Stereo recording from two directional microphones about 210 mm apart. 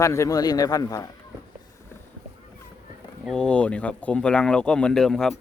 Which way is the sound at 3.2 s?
5° left (ahead or behind).